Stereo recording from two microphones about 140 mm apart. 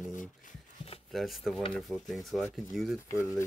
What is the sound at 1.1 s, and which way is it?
Speech, centre (ahead or behind).